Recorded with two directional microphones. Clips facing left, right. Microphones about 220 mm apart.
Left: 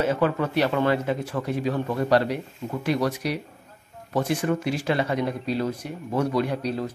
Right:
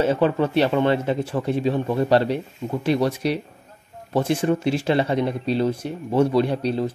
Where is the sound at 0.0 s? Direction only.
30° right (ahead or behind).